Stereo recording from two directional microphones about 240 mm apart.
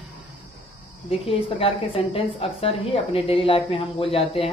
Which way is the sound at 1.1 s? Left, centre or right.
Left.